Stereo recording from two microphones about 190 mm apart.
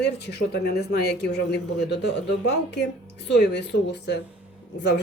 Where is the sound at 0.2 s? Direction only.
60° left (ahead or behind).